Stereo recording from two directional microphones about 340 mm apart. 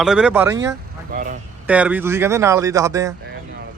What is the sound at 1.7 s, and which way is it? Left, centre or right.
A man's voice, centre.